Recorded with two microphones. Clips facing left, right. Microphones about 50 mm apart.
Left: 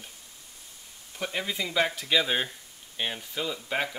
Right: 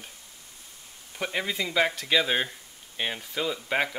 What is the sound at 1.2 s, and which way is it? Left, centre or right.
Speech, centre.